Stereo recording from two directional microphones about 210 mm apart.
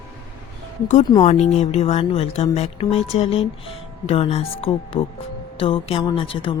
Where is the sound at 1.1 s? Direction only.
30° left (ahead or behind).